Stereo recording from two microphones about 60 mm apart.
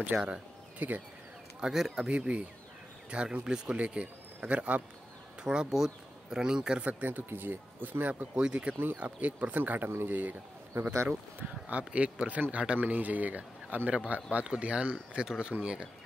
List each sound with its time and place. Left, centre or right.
0.1 s speech: right
1.6 s speech: centre
2.0 s speech: right
5.4 s speech: centre
6.9 s speech: right
8.4 s speech: centre; by 10.9 s right
11.1 s speech: right